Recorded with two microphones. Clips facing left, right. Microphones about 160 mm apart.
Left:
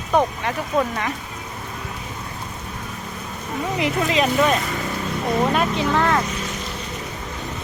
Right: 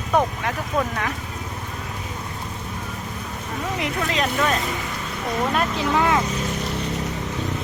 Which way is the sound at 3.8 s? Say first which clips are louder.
Left 5 dB; 5° left (ahead or behind).